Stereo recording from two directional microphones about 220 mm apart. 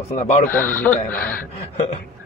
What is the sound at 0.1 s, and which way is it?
Speech, 30° left (ahead or behind).